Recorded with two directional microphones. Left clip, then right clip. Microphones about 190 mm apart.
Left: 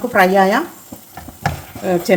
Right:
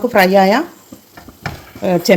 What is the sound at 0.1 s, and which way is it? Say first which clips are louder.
Speech: right 1 dB; 35° right (ahead or behind).